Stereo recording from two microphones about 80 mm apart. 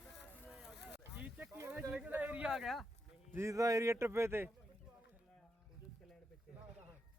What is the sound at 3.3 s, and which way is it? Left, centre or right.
Speech, right.